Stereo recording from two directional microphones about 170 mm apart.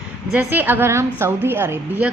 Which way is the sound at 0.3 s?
10° right (ahead or behind).